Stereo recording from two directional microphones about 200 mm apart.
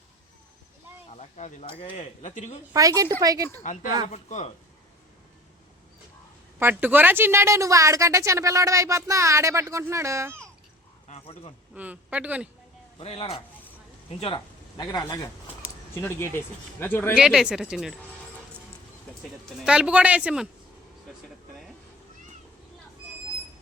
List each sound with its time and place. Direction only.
1.1 s speech: 35° left (ahead or behind)
2.7 s a woman's voice: 15° right (ahead or behind)
3.6 s speech: 40° left (ahead or behind)
6.6 s a woman's voice: 10° right (ahead or behind)
11.1 s a sound: 30° left (ahead or behind)
11.7 s a woman's voice: 5° right (ahead or behind)
13.0 s speech: 30° left (ahead or behind); by 17.2 s 10° left (ahead or behind)
17.2 s speech: 5° right (ahead or behind)
19.5 s speech: 5° right (ahead or behind)